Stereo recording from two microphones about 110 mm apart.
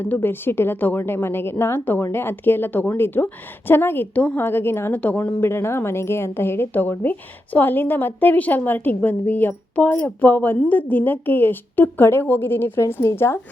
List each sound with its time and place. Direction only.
0.0 s a woman's voice: 20° left (ahead or behind)